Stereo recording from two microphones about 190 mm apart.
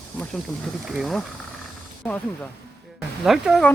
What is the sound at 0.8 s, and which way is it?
Speech, centre (ahead or behind).